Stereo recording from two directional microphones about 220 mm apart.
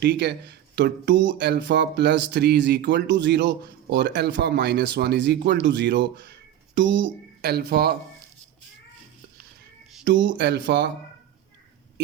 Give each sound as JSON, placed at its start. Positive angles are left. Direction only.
{"t": 0.0, "sound": "speech", "side_deg": -50}
{"t": 10.0, "sound": "speech", "side_deg": -55}